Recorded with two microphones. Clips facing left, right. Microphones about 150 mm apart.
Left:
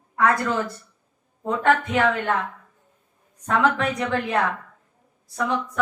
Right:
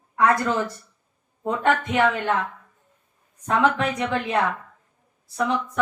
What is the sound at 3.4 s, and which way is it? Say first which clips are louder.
Speech: even; 15° right (ahead or behind).